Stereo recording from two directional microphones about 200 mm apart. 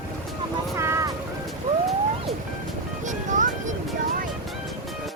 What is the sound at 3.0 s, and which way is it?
Music, 40° right (ahead or behind).